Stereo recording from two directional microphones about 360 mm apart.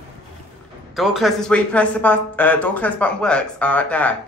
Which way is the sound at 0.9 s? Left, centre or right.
Centre.